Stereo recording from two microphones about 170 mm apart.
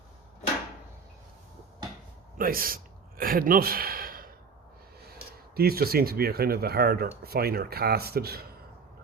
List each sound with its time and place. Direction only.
2.4 s speech: 60° right (ahead or behind)